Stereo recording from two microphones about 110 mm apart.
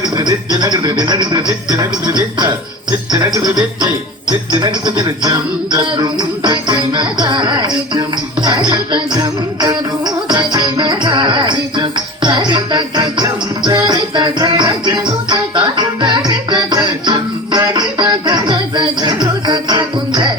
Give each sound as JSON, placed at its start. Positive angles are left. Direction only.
{"t": 0.2, "sound": "music", "side_deg": -40}